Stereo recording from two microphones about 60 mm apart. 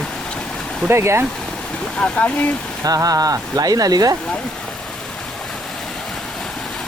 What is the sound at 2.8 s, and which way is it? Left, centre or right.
Speech, right.